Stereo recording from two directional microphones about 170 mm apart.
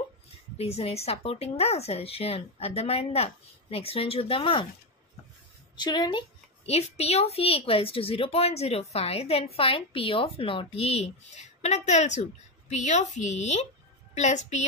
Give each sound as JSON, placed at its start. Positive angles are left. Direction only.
{"t": 0.6, "sound": "a woman's voice", "side_deg": 35}
{"t": 5.8, "sound": "a woman's voice", "side_deg": 25}